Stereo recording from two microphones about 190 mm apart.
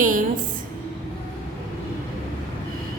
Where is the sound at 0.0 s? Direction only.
45° right (ahead or behind).